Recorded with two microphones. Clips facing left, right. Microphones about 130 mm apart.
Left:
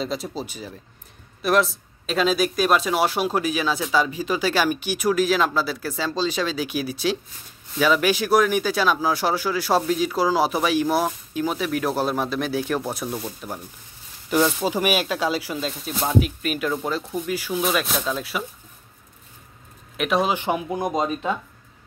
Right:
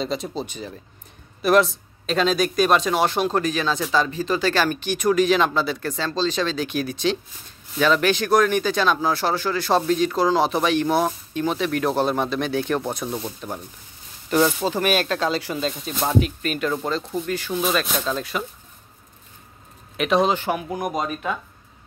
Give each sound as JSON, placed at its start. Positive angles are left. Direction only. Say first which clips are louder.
{"t": 0.0, "sound": "speech", "louder": "right 1 dB", "side_deg": 0}
{"t": 20.0, "sound": "speech", "louder": "right 2 dB", "side_deg": 5}
{"t": 20.4, "sound": "speech", "louder": "left 1 dB", "side_deg": 20}